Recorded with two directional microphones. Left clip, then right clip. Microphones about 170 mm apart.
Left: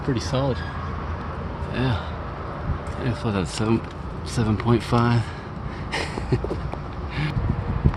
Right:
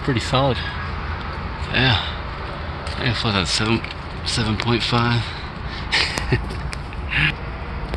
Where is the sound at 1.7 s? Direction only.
10° right (ahead or behind).